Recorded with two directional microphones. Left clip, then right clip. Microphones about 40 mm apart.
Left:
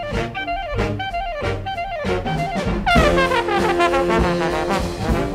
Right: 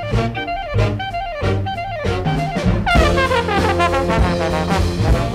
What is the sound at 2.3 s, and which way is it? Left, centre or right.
Brass instrument, left.